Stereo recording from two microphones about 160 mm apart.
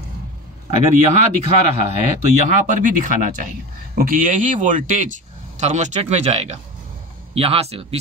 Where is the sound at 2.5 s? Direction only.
50° right (ahead or behind).